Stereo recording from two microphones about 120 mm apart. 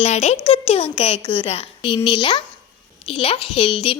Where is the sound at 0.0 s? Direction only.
70° left (ahead or behind).